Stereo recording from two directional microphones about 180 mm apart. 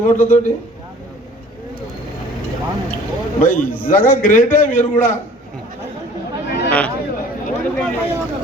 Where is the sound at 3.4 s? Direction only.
45° left (ahead or behind).